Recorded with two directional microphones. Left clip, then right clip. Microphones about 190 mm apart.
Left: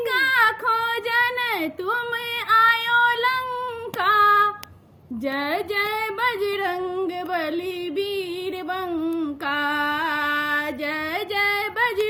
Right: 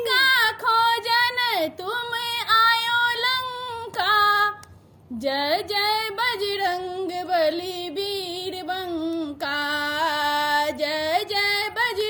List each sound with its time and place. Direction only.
0.0 s a sound: 15° right (ahead or behind)
2.5 s child singing: 15° right (ahead or behind)
4.0 s music: 15° right (ahead or behind)
5.2 s female singing: 20° right (ahead or behind)
9.1 s female singing: 20° right (ahead or behind)
11.1 s music: 15° right (ahead or behind)